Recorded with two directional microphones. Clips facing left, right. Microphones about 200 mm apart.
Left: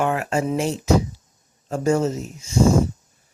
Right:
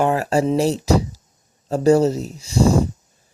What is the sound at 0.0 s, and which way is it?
Speech, 35° right (ahead or behind).